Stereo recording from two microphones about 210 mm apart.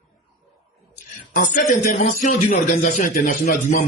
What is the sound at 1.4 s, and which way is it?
A man's voice, 35° left (ahead or behind).